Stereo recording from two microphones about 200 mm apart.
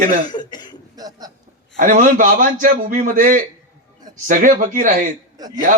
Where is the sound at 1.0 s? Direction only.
20° right (ahead or behind).